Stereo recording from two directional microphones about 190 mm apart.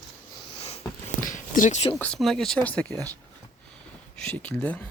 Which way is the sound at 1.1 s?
45° left (ahead or behind).